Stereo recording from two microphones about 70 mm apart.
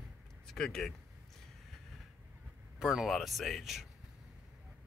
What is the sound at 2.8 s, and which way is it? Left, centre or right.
Speech, centre.